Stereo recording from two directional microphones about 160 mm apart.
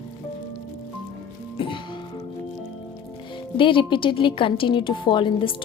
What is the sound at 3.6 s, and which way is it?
A woman's voice, 30° left (ahead or behind).